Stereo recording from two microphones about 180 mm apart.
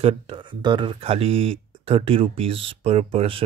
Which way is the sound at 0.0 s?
30° right (ahead or behind).